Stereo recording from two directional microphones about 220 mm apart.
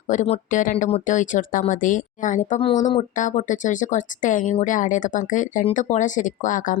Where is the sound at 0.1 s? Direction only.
35° left (ahead or behind).